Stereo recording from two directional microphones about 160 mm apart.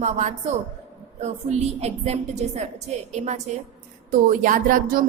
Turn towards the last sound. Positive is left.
turn(degrees=-60)  # may be behind; listen again after turning